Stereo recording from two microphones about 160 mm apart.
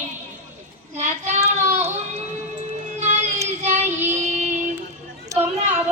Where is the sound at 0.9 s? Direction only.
45° right (ahead or behind).